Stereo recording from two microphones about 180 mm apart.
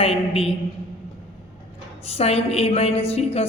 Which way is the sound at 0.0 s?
35° left (ahead or behind).